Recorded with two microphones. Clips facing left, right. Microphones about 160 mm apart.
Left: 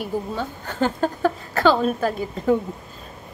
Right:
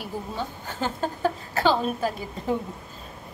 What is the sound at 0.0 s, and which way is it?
Speech, 55° left (ahead or behind).